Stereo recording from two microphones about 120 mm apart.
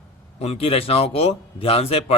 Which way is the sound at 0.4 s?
55° left (ahead or behind).